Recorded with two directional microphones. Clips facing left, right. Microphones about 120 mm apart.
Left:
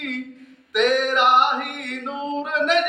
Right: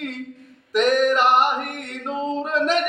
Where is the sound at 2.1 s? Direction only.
40° right (ahead or behind).